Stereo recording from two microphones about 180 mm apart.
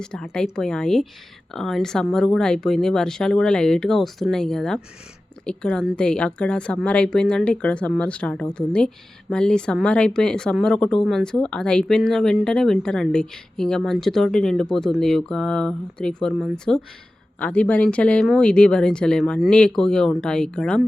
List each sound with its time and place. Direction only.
0.0 s speech: 5° left (ahead or behind)